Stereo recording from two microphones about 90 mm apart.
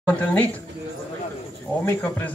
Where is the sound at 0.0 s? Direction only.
15° left (ahead or behind).